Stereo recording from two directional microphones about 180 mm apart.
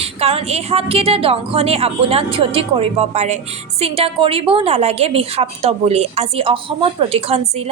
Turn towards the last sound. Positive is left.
turn(degrees=-35)  # may be behind; listen again after turning